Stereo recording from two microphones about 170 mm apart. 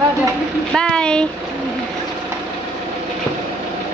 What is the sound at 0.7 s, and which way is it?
Speech, 5° left (ahead or behind).